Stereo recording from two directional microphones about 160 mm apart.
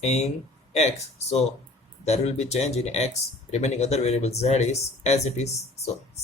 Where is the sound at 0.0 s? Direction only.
40° left (ahead or behind).